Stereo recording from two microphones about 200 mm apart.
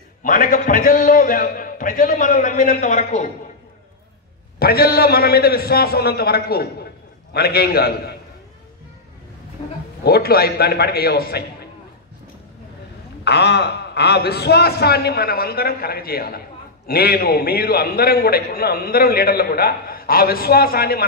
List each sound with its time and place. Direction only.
0.2 s a man's voice: 45° left (ahead or behind)
4.6 s a man's voice: 50° left (ahead or behind)
9.6 s a sound: 25° left (ahead or behind)
10.0 s a man's voice: 50° left (ahead or behind)
13.2 s a man's voice: 55° left (ahead or behind)